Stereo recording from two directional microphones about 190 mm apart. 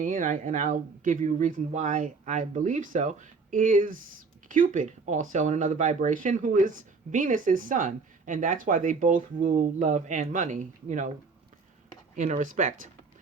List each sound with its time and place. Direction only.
0.0 s speech: 40° right (ahead or behind)
12.1 s speech: 40° right (ahead or behind)